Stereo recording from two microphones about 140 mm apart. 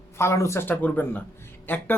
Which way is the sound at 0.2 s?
20° left (ahead or behind).